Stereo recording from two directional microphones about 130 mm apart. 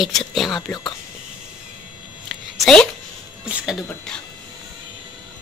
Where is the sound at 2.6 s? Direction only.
5° left (ahead or behind).